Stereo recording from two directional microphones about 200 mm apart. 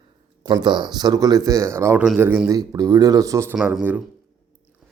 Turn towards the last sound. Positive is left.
turn(degrees=-10)  # may be behind; listen again after turning